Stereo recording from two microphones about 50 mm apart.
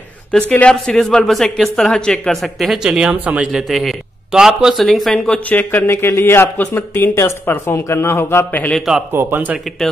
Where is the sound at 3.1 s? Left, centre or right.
Right.